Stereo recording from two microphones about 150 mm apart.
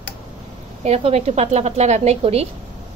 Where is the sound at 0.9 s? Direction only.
45° right (ahead or behind).